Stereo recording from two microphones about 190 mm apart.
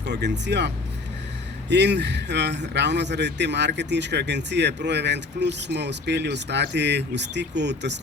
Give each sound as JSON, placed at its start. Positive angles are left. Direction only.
{"t": 0.1, "sound": "speech", "side_deg": -65}
{"t": 1.7, "sound": "speech", "side_deg": -65}